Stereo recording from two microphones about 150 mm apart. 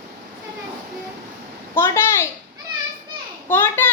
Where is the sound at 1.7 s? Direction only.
15° left (ahead or behind).